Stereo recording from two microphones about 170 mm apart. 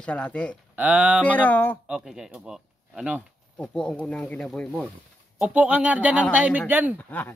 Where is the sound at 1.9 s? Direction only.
Centre (ahead or behind).